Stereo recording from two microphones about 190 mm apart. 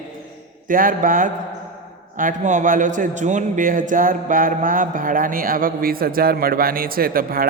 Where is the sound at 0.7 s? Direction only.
45° right (ahead or behind).